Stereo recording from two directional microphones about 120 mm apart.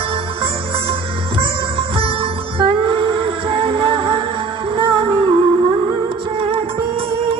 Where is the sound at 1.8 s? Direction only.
45° right (ahead or behind).